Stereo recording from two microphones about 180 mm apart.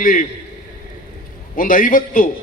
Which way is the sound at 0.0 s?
45° left (ahead or behind).